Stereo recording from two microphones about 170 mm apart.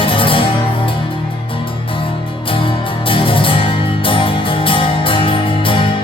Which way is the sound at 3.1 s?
30° left (ahead or behind).